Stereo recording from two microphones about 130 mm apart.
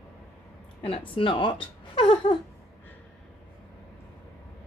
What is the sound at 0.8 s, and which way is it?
Speech, 45° left (ahead or behind).